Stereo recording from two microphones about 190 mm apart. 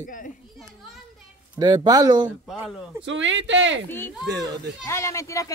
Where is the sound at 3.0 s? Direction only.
75° right (ahead or behind).